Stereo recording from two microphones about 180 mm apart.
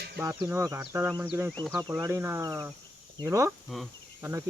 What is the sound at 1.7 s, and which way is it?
Speech, 20° right (ahead or behind).